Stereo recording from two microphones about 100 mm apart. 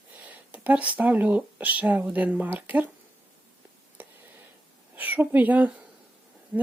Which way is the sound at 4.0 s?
20° right (ahead or behind).